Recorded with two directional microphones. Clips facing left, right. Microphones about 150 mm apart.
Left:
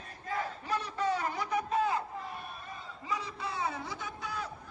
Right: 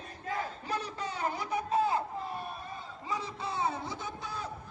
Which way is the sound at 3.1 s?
25° right (ahead or behind).